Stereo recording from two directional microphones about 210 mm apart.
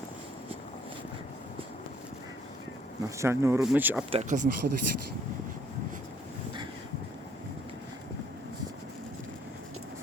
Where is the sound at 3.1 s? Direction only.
15° right (ahead or behind).